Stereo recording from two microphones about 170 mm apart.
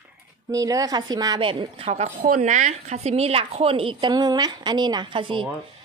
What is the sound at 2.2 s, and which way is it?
Speech, 50° right (ahead or behind).